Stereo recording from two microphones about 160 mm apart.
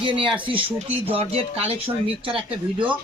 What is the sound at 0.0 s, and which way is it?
Speech, 30° right (ahead or behind).